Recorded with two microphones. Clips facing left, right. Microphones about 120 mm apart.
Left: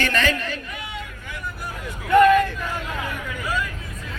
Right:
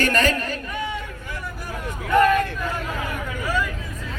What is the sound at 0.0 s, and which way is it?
Speech, 45° right (ahead or behind).